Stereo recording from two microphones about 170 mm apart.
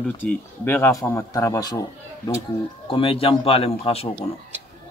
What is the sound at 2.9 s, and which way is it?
A man's voice, 35° left (ahead or behind).